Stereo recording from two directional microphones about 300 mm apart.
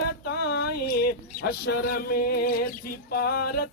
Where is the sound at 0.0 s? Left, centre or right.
Left.